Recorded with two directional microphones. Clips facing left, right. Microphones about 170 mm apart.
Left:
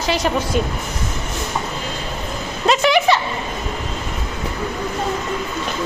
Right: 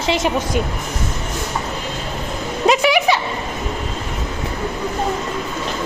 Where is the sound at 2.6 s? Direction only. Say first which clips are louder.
Even; 10° right (ahead or behind).